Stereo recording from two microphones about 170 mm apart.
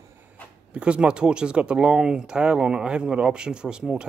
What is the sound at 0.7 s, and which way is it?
Speech, 5° right (ahead or behind).